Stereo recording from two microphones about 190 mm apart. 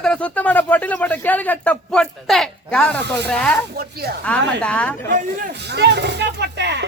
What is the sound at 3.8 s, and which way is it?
Speech, 55° right (ahead or behind).